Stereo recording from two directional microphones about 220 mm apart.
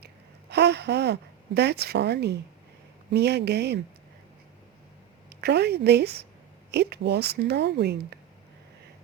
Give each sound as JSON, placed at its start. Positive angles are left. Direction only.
{"t": 0.5, "sound": "a woman's voice", "side_deg": -50}
{"t": 5.3, "sound": "a woman's voice", "side_deg": -50}